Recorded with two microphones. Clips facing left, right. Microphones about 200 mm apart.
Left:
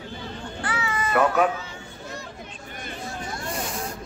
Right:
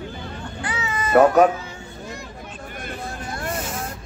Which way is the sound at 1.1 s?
40° right (ahead or behind).